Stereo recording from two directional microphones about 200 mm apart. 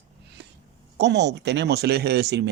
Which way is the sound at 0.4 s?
60° right (ahead or behind).